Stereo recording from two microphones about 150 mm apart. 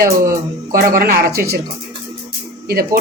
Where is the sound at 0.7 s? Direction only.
75° right (ahead or behind).